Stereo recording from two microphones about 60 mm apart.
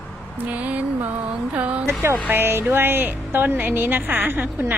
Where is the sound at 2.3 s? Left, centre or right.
Right.